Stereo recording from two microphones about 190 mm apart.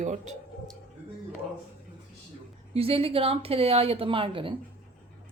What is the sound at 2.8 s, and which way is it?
A woman's voice, 30° right (ahead or behind).